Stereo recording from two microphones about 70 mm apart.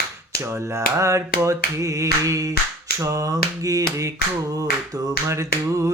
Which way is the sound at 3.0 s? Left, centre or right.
Right.